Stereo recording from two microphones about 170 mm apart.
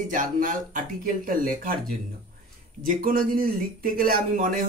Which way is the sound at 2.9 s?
55° right (ahead or behind).